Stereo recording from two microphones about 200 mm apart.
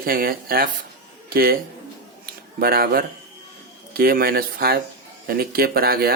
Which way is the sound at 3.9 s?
50° right (ahead or behind).